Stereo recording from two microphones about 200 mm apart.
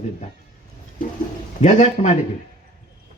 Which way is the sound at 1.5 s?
35° left (ahead or behind).